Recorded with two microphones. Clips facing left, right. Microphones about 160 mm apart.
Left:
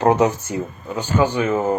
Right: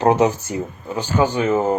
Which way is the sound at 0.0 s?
25° right (ahead or behind).